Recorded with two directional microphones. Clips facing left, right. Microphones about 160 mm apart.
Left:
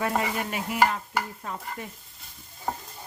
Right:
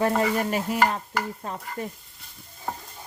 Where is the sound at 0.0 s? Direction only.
35° right (ahead or behind).